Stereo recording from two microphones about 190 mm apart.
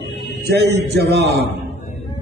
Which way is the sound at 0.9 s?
60° right (ahead or behind).